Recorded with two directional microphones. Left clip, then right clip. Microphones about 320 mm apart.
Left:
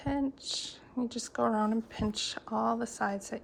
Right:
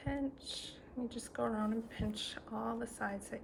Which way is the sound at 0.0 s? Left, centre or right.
Centre.